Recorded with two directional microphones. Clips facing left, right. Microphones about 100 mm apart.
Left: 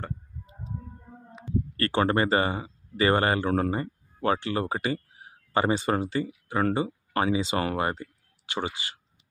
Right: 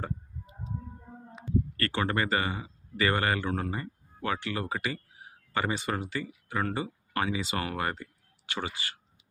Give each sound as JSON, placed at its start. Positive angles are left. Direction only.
{"t": 1.8, "sound": "speech", "side_deg": 35}